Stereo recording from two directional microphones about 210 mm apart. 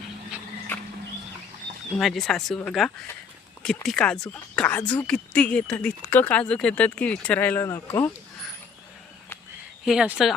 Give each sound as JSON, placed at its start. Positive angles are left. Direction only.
{"t": 2.0, "sound": "speech", "side_deg": 0}
{"t": 9.8, "sound": "speech", "side_deg": -5}